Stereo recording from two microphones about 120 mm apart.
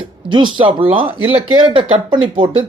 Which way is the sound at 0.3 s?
40° right (ahead or behind).